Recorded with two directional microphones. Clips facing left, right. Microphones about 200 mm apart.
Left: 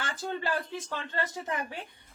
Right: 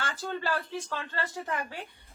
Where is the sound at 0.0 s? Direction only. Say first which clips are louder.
Even; 15° left (ahead or behind).